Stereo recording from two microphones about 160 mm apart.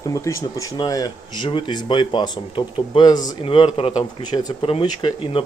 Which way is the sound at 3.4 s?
35° left (ahead or behind).